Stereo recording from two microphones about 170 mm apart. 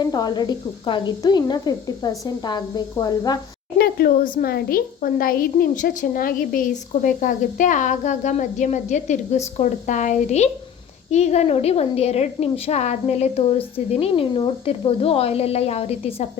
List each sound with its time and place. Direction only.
0.0 s speech: 25° left (ahead or behind)
3.8 s a woman's voice: 65° left (ahead or behind); by 16.3 s 35° left (ahead or behind)